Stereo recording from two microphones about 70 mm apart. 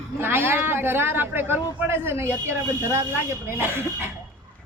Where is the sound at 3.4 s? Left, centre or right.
Right.